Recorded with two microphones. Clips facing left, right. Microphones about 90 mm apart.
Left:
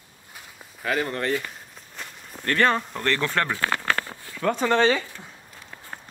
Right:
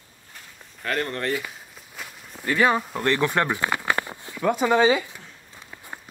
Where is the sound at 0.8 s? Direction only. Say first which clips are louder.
Left 1 dB; centre (ahead or behind).